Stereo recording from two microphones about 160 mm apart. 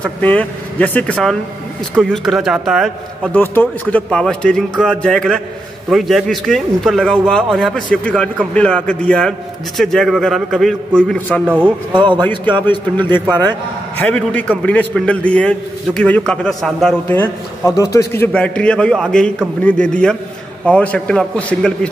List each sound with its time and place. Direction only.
0.0 s a man's voice: 10° left (ahead or behind)
3.3 s a man's voice: 10° left (ahead or behind)
11.4 s speech: 5° right (ahead or behind)
12.3 s a man's voice: 30° right (ahead or behind)
12.6 s a man's voice: 10° left (ahead or behind)
17.1 s a man's voice: 15° left (ahead or behind)